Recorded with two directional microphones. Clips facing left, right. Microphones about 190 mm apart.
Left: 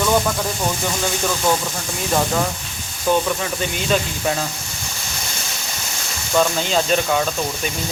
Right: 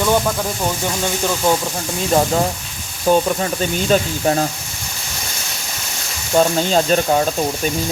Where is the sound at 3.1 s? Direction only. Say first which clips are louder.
Right 4 dB; 20° right (ahead or behind).